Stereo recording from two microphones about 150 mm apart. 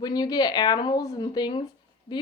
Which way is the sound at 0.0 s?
25° left (ahead or behind).